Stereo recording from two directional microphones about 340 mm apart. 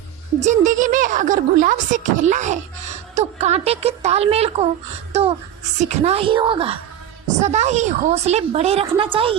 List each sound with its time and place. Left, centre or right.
0.3 s a woman's voice: right
5.8 s a woman's voice: centre